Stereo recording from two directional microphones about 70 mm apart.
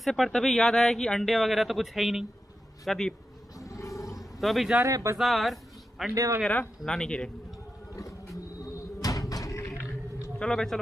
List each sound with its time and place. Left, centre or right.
0.0 s speech: centre
2.8 s speech: centre
3.5 s roar: left
4.2 s a sound: centre
4.8 s speech: right
5.1 s speech: centre
6.8 s speech: centre
7.9 s a sound: left
10.4 s speech: centre